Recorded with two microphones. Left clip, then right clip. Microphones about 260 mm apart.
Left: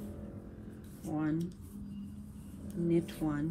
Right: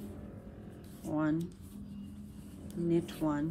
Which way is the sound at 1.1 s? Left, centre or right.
Centre.